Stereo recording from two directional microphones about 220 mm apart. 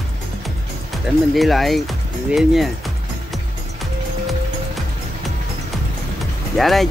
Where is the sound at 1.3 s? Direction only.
Centre (ahead or behind).